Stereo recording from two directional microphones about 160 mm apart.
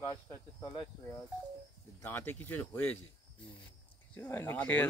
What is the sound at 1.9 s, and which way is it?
Speech, 15° left (ahead or behind).